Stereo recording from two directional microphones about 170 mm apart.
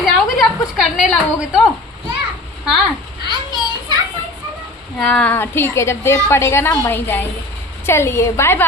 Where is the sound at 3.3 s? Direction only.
25° right (ahead or behind).